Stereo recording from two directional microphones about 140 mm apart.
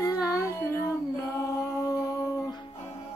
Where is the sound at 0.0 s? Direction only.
25° left (ahead or behind).